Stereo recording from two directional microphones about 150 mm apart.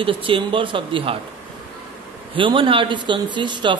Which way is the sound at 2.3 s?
35° right (ahead or behind).